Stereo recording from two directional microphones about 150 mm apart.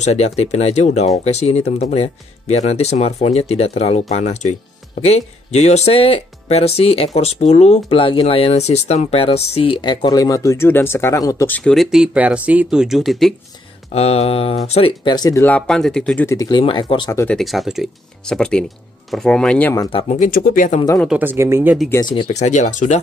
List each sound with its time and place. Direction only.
0.0 s speech: 45° left (ahead or behind); by 13.3 s centre (ahead or behind)
13.9 s speech: 45° left (ahead or behind)
15.1 s speech: 25° left (ahead or behind)
15.4 s speech: 10° left (ahead or behind)
16.3 s speech: 25° left (ahead or behind)
17.3 s speech: centre (ahead or behind)
20.1 s speech: 65° left (ahead or behind)
21.1 s speech: 15° right (ahead or behind)
22.0 s speech: 30° left (ahead or behind)
22.3 s speech: 50° left (ahead or behind)